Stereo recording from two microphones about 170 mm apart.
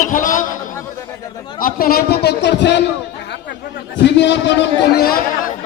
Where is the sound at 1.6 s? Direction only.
60° left (ahead or behind); by 2.8 s 85° left.